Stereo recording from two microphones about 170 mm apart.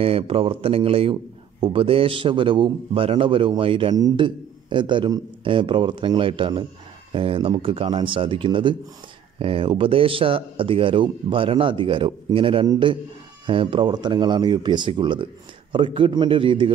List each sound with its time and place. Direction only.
0.0 s a man's voice: 35° right (ahead or behind)